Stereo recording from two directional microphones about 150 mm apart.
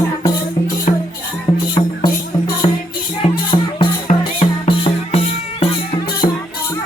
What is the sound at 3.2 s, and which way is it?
Music, 30° left (ahead or behind).